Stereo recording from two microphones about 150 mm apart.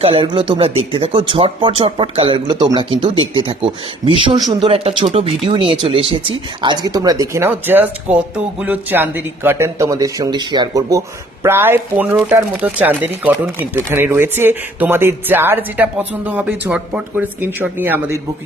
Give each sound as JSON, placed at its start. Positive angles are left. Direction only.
{"t": 0.0, "sound": "speech", "side_deg": -35}